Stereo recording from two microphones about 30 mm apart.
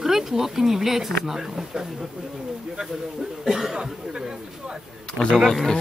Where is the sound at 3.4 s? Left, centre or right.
Centre.